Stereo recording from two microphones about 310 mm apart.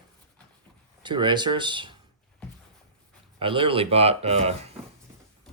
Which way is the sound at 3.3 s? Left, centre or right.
Centre.